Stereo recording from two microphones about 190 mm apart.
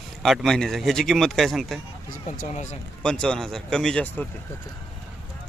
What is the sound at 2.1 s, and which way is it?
Speech, 40° left (ahead or behind).